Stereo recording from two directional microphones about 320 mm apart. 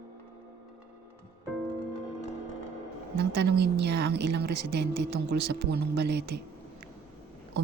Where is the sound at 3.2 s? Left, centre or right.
Right.